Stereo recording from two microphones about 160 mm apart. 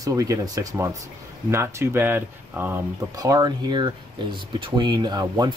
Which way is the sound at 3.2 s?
25° right (ahead or behind).